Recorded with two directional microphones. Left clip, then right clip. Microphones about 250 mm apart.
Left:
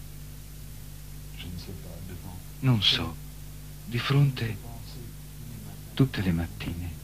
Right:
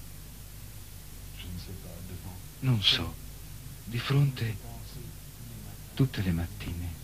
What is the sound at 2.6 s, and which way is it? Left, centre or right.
Speech, centre.